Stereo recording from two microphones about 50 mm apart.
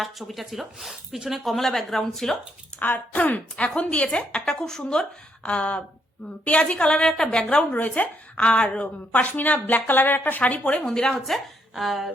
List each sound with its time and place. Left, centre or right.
0.0 s a woman's voice: centre
2.7 s a woman's voice: left
3.6 s a woman's voice: left
4.4 s a woman's voice: centre
7.7 s a woman's voice: left
9.1 s a woman's voice: left
10.6 s a woman's voice: centre